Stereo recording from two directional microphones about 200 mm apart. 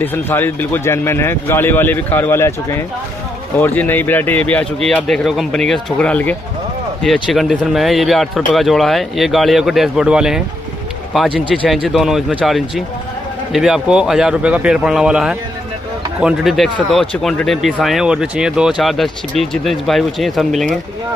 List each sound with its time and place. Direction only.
0.0 s speech: 10° left (ahead or behind)